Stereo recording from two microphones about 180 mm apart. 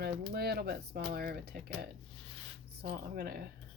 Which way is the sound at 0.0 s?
60° right (ahead or behind).